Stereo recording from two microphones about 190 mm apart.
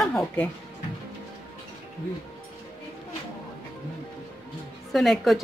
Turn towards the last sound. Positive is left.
turn(degrees=0)  # may be behind; listen again after turning